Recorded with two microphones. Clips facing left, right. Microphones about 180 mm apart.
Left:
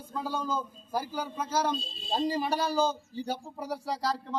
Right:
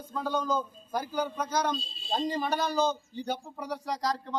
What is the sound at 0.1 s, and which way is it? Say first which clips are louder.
A man's voice: right 3 dB; 5° left (ahead or behind).